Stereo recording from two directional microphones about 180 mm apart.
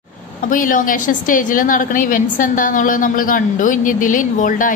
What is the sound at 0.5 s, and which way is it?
A woman's voice, 50° left (ahead or behind).